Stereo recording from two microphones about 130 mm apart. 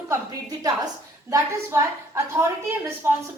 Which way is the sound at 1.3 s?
20° right (ahead or behind).